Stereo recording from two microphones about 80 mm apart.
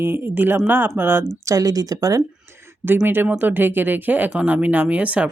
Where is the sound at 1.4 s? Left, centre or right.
Right.